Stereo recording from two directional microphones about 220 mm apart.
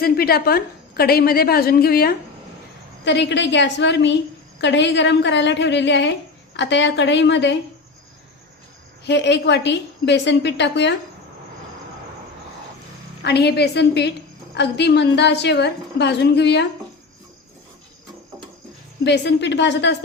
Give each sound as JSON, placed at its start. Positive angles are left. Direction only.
{"t": 0.0, "sound": "a woman's voice", "side_deg": 45}
{"t": 9.0, "sound": "a woman's voice", "side_deg": 50}
{"t": 13.2, "sound": "a woman's voice", "side_deg": 50}
{"t": 19.0, "sound": "a woman's voice", "side_deg": 50}